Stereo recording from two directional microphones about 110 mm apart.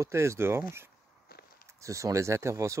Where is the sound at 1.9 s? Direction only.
30° right (ahead or behind).